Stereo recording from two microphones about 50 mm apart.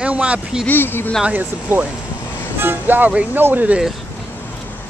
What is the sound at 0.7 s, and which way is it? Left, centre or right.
Speech, left.